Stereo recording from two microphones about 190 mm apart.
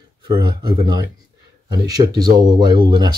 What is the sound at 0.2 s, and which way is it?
Speech, 25° right (ahead or behind).